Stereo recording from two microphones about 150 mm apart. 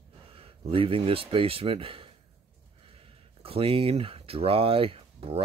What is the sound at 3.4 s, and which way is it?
Speech, 40° right (ahead or behind).